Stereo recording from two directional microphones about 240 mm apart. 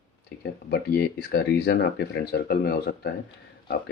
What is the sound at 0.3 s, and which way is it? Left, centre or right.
Speech, left.